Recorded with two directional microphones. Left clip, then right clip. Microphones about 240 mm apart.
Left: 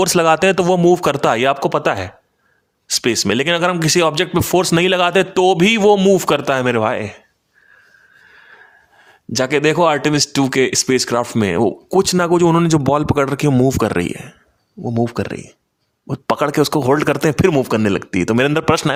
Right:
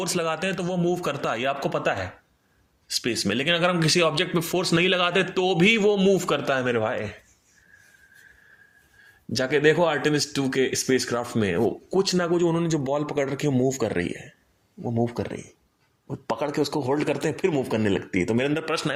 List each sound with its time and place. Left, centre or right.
0.0 s speech: left
9.0 s speech: left